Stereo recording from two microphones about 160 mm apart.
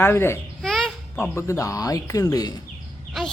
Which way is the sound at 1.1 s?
15° left (ahead or behind).